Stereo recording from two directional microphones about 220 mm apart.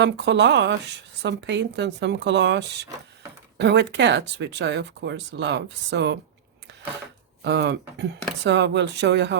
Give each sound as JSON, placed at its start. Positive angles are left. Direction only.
{"t": 0.0, "sound": "speech", "side_deg": -55}
{"t": 7.4, "sound": "speech", "side_deg": -55}